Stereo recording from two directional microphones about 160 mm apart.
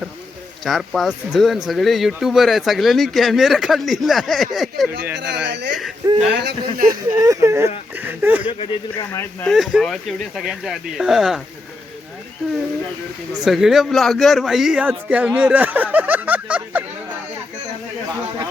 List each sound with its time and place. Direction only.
0.6 s speech: centre (ahead or behind)
5.1 s speech: 90° right
6.8 s speech: 20° right (ahead or behind)
8.4 s speech: 35° left (ahead or behind)
9.5 s speech: centre (ahead or behind)
13.4 s a man's voice: centre (ahead or behind)